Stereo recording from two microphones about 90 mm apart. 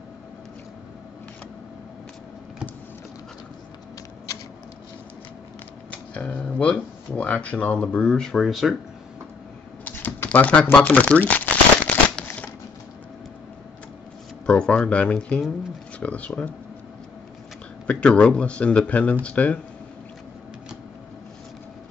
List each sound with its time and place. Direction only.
6.1 s speech: 15° left (ahead or behind)
9.8 s shuffling cards: 20° left (ahead or behind)
14.4 s speech: 10° left (ahead or behind)
17.8 s speech: 15° left (ahead or behind)